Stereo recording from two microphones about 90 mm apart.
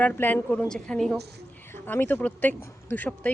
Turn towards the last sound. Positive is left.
turn(degrees=20)  # may be behind; listen again after turning